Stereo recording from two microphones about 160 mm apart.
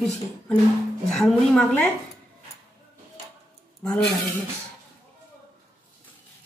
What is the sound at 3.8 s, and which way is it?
Speech, 5° left (ahead or behind).